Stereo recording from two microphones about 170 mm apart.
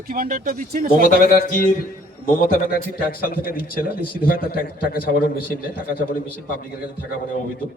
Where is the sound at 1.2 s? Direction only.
55° left (ahead or behind).